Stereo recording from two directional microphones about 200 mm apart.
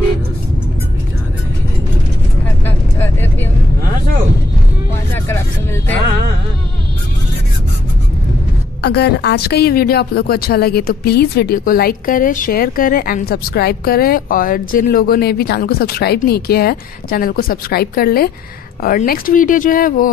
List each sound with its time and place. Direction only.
2.6 s vehicle: 10° left (ahead or behind)
8.8 s a woman's voice: 55° left (ahead or behind)